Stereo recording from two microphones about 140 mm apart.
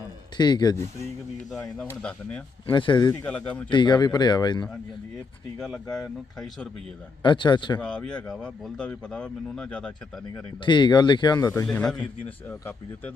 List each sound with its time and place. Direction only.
0.3 s speech: 30° left (ahead or behind)
0.8 s speech: 55° right (ahead or behind)
1.5 s speech: 5° left (ahead or behind)
2.6 s speech: 35° left (ahead or behind)
3.1 s speech: 10° left (ahead or behind)
3.7 s speech: 35° left (ahead or behind)
5.5 s speech: 5° left (ahead or behind)
7.2 s speech: 35° left (ahead or behind)
7.8 s speech: 5° left (ahead or behind)
10.6 s speech: 35° left (ahead or behind)
11.6 s speech: 5° left (ahead or behind)